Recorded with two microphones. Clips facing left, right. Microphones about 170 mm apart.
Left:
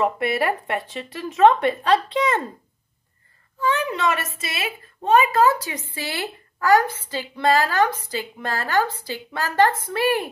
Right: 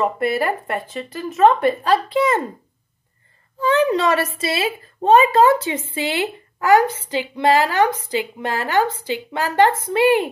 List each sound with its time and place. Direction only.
0.0 s speech: centre (ahead or behind)
3.5 s speech: 30° right (ahead or behind)